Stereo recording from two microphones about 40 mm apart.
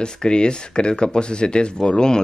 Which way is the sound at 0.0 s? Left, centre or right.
Left.